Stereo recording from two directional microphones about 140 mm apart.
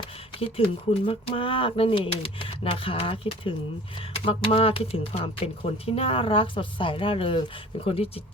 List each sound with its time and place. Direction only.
0.3 s speech: 45° left (ahead or behind)